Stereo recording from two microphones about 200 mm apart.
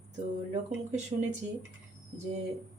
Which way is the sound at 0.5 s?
35° right (ahead or behind).